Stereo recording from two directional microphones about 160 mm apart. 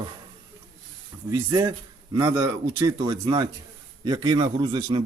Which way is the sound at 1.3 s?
20° right (ahead or behind).